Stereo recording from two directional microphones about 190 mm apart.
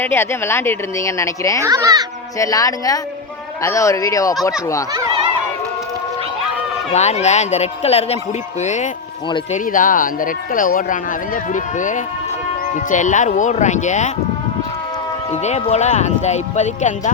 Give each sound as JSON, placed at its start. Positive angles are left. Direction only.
{"t": 0.0, "sound": "a woman's voice", "side_deg": 10}
{"t": 1.6, "sound": "speech", "side_deg": -20}
{"t": 2.4, "sound": "a woman's voice", "side_deg": 20}
{"t": 6.9, "sound": "speech", "side_deg": 35}
{"t": 15.3, "sound": "speech", "side_deg": 35}